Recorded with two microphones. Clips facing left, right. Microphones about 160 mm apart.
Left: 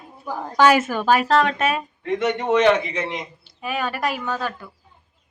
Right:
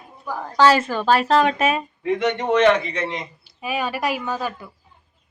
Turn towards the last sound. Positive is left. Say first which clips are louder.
# right 1 dB
turn(degrees=-10)  # may be behind; listen again after turning